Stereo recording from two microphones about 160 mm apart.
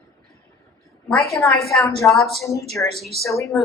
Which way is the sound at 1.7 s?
Centre (ahead or behind).